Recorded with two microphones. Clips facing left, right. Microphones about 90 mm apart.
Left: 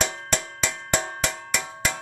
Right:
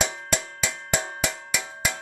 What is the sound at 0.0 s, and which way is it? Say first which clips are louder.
Cowbell: even; 5° right (ahead or behind).